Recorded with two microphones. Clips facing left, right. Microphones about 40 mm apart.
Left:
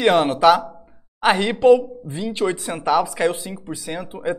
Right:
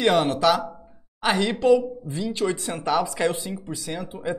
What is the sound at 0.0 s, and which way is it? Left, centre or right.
A woman's voice, centre.